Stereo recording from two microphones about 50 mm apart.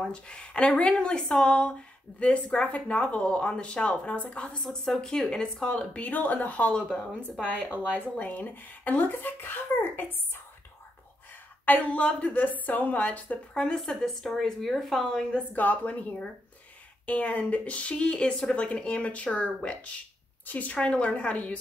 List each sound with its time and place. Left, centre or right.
0.1 s speech: left
4.9 s speech: centre
5.9 s speech: left
11.6 s speech: left
13.7 s a woman's voice: centre
15.0 s speech: centre
15.5 s speech: left
20.4 s speech: left
20.8 s speech: left